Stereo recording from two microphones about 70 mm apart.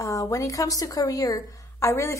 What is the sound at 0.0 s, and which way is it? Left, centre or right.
A woman's voice, left.